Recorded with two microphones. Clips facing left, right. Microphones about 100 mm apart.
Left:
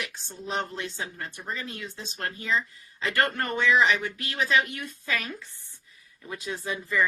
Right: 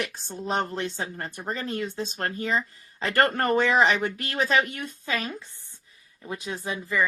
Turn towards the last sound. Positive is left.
turn(degrees=-15)  # may be behind; listen again after turning